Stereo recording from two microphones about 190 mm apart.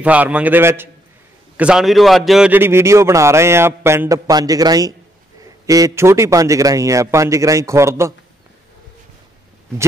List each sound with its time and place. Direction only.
0.0 s a man's voice: 5° right (ahead or behind)